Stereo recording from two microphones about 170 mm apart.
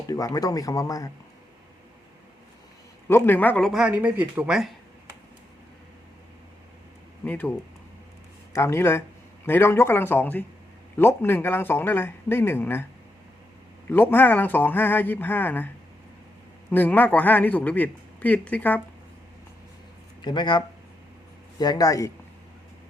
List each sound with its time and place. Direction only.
0.1 s speech: 20° left (ahead or behind)
3.1 s speech: 10° left (ahead or behind); by 4.7 s 5° right (ahead or behind)
7.3 s speech: 10° left (ahead or behind)
8.5 s speech: 15° left (ahead or behind)
13.9 s speech: 10° left (ahead or behind)
16.7 s speech: 10° left (ahead or behind)
20.2 s speech: 25° left (ahead or behind)